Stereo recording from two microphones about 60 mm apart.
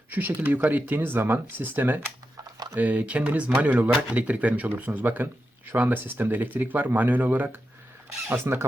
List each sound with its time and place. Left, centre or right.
0.1 s speech: right
8.3 s speech: right